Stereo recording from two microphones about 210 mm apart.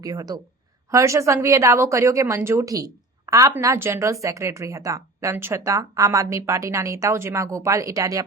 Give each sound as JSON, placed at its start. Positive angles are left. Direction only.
{"t": 0.0, "sound": "speech", "side_deg": -15}